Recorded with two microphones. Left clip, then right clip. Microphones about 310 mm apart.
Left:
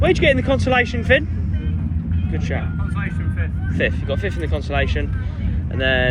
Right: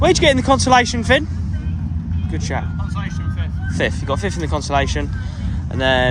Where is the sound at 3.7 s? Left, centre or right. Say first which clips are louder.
Right 1 dB; right.